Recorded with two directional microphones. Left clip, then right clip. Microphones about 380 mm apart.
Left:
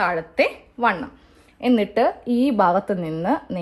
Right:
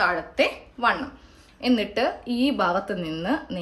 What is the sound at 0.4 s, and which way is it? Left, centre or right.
A woman's voice, centre.